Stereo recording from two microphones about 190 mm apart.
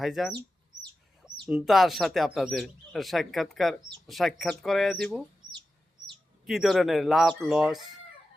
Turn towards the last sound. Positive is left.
turn(degrees=-5)  # may be behind; listen again after turning